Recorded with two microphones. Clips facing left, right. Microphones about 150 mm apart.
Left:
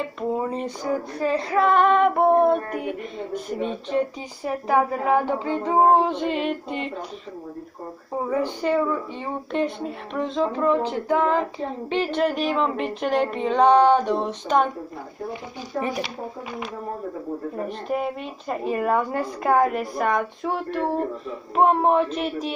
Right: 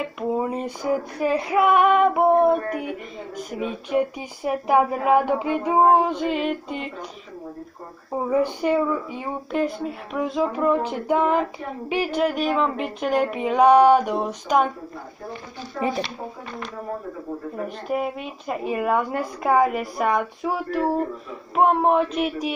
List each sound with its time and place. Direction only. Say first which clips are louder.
0.0 s female singing: right 1 dB; 10° right (ahead or behind)
4.5 s female singing: right 2 dB; 20° right (ahead or behind); by 6.9 s centre (ahead or behind)
8.2 s female singing: right 3 dB; 15° right (ahead or behind)
12.2 s a woman's voice: right 1 dB; 5° right (ahead or behind)
17.6 s a woman's voice: right 1 dB; 5° right (ahead or behind)